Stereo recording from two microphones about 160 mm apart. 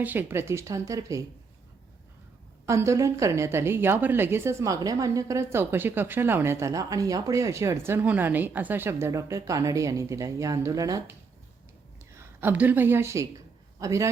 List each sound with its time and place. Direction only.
0.0 s a woman's voice: 10° right (ahead or behind)
2.6 s a woman's voice: 20° right (ahead or behind)
12.1 s speech: 15° right (ahead or behind)